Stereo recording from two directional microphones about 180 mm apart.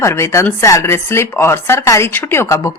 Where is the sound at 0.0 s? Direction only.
15° left (ahead or behind).